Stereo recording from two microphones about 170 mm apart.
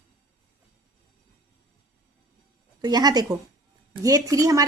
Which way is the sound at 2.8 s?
25° right (ahead or behind).